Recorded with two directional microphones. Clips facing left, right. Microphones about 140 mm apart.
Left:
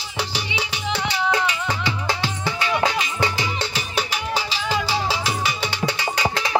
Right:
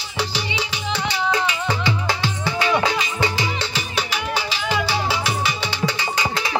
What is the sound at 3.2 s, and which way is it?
Music, 45° left (ahead or behind).